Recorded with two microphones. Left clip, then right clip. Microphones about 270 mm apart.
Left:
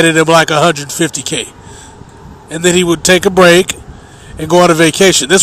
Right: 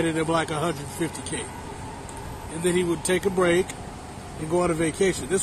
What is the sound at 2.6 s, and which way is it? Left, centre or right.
A man's voice, left.